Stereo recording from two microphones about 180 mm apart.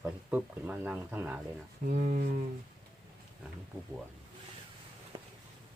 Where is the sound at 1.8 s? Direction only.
50° right (ahead or behind).